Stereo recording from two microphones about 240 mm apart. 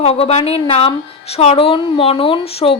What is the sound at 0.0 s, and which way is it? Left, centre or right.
Speech, left.